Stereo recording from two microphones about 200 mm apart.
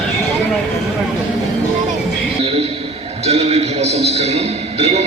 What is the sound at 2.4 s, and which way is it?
Basketball bounce, 30° right (ahead or behind).